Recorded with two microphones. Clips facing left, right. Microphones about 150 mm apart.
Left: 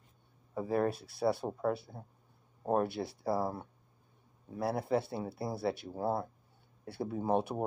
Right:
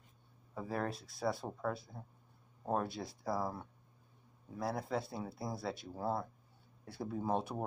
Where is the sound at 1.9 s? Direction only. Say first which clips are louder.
Left 2 dB; 25° left (ahead or behind).